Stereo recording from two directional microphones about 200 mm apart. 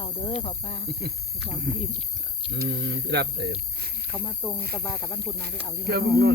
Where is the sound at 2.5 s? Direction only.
60° right (ahead or behind).